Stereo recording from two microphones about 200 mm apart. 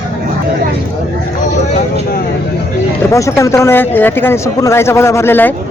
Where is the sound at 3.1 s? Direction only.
15° left (ahead or behind).